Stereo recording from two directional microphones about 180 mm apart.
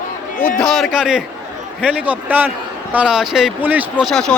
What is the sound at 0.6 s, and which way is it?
Speech, centre (ahead or behind).